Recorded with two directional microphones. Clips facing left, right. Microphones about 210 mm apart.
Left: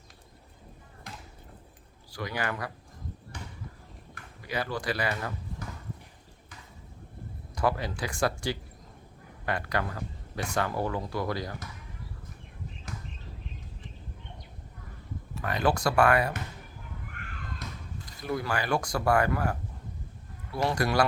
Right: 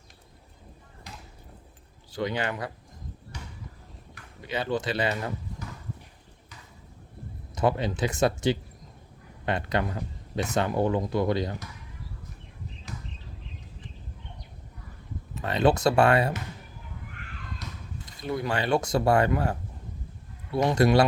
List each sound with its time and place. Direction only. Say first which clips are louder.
2.1 s speech: right 4 dB; 25° right (ahead or behind)
4.4 s speech: right 4 dB; 25° right (ahead or behind)
7.5 s speech: right 3 dB; 20° right (ahead or behind)
15.4 s speech: right 5 dB; 25° right (ahead or behind)
18.0 s speech: right 2 dB; 25° right (ahead or behind)